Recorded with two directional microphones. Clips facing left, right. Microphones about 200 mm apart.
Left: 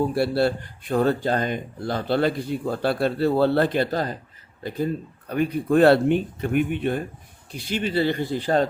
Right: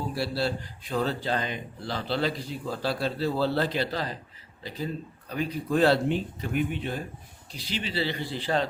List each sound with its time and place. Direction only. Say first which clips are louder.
0.1 s speech: left 7 dB; 55° left (ahead or behind)
5.3 s speech: left 7 dB; 55° left (ahead or behind)